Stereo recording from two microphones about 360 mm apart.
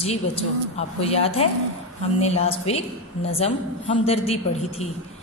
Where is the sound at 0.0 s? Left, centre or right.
Centre.